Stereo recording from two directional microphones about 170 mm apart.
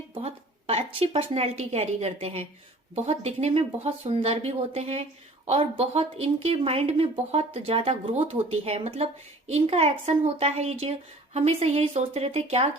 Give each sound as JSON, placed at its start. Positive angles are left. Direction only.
{"t": 0.1, "sound": "speech", "side_deg": -35}